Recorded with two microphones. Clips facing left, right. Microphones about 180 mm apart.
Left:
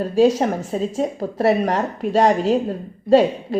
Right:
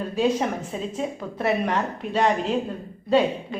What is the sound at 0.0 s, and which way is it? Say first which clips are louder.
Speech: left 7 dB; 40° left (ahead or behind).